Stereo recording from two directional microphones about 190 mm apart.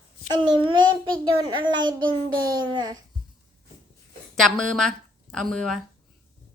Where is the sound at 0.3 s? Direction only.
25° right (ahead or behind).